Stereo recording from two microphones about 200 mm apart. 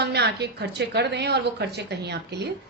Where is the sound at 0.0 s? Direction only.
55° right (ahead or behind).